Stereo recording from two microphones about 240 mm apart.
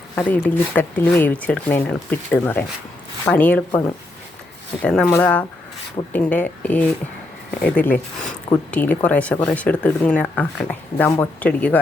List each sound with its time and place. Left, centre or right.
0.2 s speech: centre